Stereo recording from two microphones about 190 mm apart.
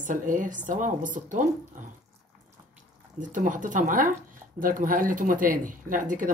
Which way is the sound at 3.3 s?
45° right (ahead or behind).